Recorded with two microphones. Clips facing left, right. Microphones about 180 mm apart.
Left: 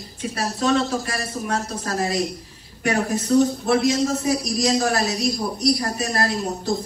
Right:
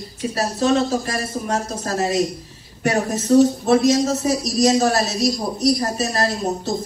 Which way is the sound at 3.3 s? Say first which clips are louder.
Right 4 dB; 45° right (ahead or behind).